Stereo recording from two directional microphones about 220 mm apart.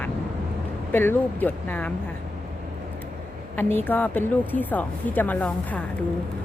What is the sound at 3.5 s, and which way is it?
A woman's voice, 10° left (ahead or behind).